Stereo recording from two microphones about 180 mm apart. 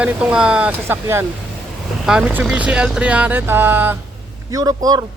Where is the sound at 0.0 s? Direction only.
5° right (ahead or behind).